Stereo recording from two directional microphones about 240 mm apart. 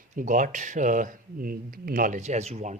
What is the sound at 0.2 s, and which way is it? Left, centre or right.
A man's voice, right.